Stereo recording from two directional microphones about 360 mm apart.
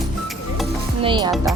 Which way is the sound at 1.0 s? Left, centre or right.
Centre.